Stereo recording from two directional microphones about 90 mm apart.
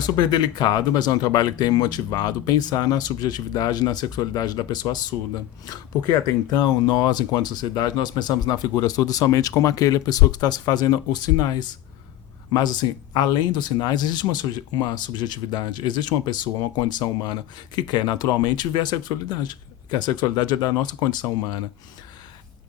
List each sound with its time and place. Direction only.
0.2 s speech: 50° left (ahead or behind)
6.6 s speech: 50° left (ahead or behind)